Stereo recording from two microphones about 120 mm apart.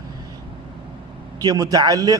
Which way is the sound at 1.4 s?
30° right (ahead or behind).